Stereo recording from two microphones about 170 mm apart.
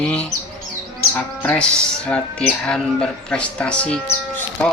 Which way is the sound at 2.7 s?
5° left (ahead or behind).